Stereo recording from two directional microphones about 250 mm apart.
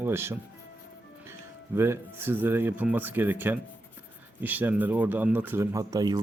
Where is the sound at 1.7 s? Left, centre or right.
Centre.